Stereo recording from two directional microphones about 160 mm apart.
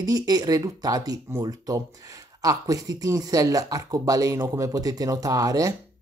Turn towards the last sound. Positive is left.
turn(degrees=-20)  # may be behind; listen again after turning